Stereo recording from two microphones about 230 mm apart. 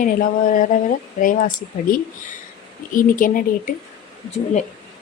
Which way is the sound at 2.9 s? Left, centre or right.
Left.